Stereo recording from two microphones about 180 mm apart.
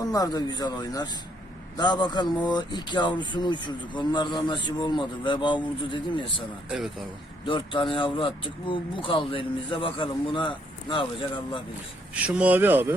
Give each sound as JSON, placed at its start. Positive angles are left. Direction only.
{"t": 0.0, "sound": "speech", "side_deg": 20}
{"t": 6.7, "sound": "speech", "side_deg": 0}
{"t": 7.4, "sound": "speech", "side_deg": 30}
{"t": 12.1, "sound": "speech", "side_deg": -5}